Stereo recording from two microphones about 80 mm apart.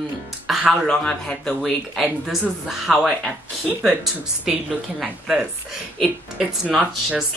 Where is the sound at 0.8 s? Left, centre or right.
Centre.